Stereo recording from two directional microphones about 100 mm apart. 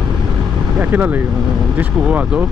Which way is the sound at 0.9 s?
20° right (ahead or behind).